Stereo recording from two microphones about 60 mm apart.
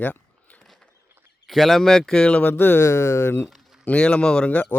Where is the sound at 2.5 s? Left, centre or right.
Left.